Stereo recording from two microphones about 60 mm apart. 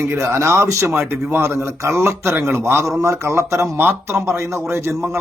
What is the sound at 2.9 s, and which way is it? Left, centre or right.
Speech, right.